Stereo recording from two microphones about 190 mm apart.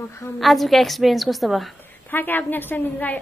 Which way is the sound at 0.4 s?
Centre (ahead or behind).